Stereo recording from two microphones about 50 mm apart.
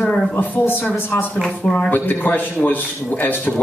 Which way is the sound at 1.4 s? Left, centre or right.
Centre.